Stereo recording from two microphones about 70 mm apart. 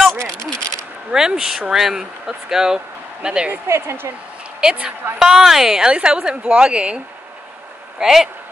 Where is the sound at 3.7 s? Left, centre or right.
Right.